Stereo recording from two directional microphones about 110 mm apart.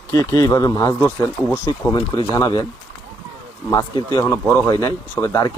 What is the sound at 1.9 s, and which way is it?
Speech, 45° left (ahead or behind).